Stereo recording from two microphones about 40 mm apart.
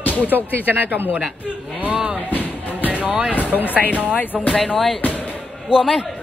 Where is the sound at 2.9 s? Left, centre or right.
Right.